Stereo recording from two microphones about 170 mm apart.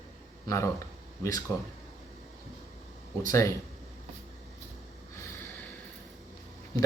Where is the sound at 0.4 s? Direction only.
15° left (ahead or behind).